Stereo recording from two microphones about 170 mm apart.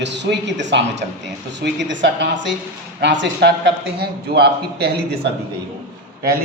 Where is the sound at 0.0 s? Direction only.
90° right; by 4.9 s 70° right (ahead or behind).